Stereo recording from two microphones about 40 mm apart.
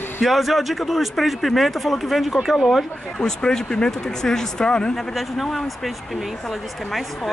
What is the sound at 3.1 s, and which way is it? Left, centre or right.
Speech, centre.